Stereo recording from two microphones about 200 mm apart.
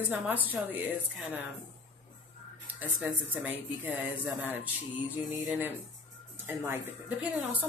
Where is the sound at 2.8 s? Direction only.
5° right (ahead or behind).